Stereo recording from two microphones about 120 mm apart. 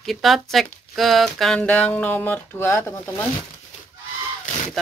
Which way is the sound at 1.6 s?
10° left (ahead or behind).